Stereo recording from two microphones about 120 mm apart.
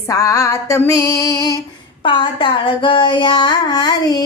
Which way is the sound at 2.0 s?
45° left (ahead or behind).